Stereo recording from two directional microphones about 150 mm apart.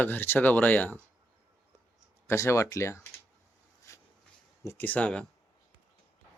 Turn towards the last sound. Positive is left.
turn(degrees=10)  # may be behind; listen again after turning